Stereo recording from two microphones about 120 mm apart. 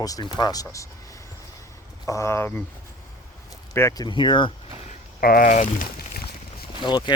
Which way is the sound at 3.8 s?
30° left (ahead or behind).